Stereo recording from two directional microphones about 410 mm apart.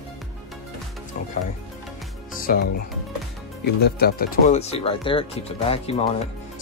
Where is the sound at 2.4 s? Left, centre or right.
Left.